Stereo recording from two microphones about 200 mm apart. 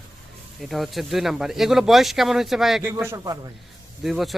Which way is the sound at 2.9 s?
15° right (ahead or behind).